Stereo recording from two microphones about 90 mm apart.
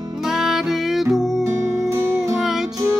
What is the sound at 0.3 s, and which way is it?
Music, 5° right (ahead or behind).